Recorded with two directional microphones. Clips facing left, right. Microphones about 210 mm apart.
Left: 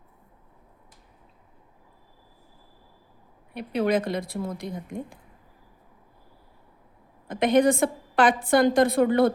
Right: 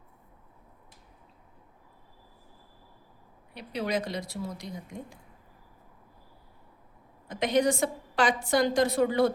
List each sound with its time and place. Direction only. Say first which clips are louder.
3.5 s a woman's voice: left 7 dB; 55° left (ahead or behind)
7.3 s a woman's voice: left 5 dB; 55° left (ahead or behind)